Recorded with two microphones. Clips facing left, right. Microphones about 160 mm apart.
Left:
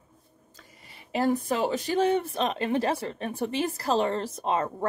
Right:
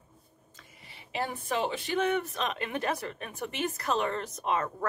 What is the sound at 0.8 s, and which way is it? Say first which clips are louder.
A woman's voice: left 9 dB; 40° left (ahead or behind).